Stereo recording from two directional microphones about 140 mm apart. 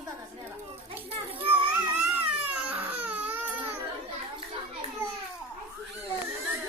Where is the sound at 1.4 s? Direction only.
40° right (ahead or behind).